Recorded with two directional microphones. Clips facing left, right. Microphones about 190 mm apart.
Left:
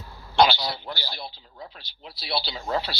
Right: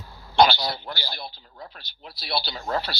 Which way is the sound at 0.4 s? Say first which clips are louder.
Right 1 dB; 45° right (ahead or behind).